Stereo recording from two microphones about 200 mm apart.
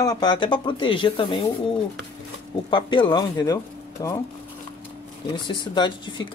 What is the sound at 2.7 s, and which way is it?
Speech, 25° left (ahead or behind).